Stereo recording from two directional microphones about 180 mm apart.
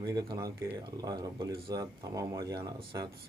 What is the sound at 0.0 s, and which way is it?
Speech, 20° right (ahead or behind).